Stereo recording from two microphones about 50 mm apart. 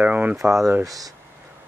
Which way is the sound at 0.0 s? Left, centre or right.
Right.